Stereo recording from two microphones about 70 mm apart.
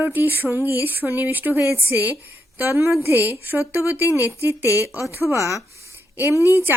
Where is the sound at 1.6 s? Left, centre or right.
Right.